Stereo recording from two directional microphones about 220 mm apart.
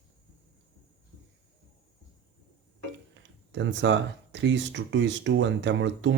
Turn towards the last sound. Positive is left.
turn(degrees=-55)  # may be behind; listen again after turning